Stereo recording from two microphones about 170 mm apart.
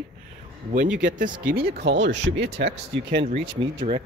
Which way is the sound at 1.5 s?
70° right (ahead or behind).